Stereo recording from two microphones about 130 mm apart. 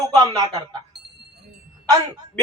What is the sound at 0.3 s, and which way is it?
Speech, 30° right (ahead or behind).